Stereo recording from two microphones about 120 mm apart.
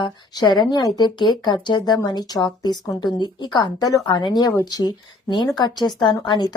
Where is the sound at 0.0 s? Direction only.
35° left (ahead or behind).